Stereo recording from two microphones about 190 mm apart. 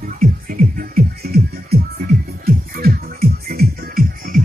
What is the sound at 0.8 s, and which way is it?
Music, 55° right (ahead or behind).